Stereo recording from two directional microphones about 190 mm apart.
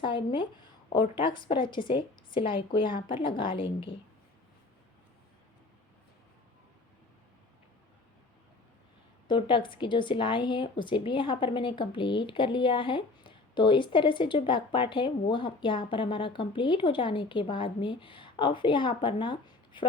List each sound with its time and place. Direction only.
0.0 s a woman's voice: 25° left (ahead or behind)
9.2 s a woman's voice: 25° left (ahead or behind)